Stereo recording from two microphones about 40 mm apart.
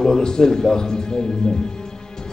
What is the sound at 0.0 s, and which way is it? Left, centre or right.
Speech, centre.